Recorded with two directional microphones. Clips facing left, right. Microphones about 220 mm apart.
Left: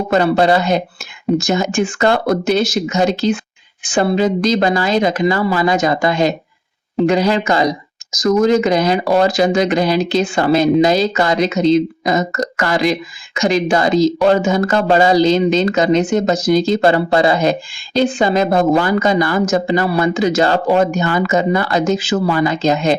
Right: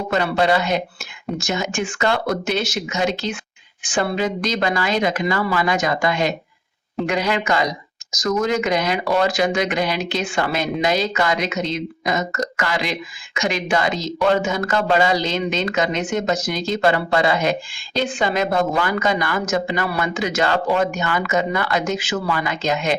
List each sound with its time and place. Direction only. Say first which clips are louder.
0.1 s speech: left 6 dB; 40° left (ahead or behind)